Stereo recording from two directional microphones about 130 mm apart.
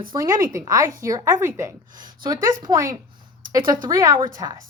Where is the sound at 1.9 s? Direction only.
90° right.